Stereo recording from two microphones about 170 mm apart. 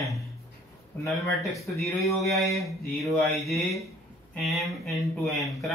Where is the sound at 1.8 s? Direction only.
Centre (ahead or behind).